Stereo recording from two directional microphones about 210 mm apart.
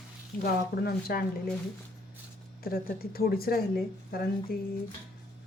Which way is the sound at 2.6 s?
45° left (ahead or behind).